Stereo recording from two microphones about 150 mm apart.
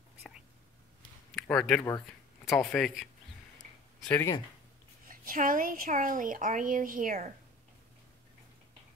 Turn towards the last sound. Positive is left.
turn(degrees=-65)  # may be behind; listen again after turning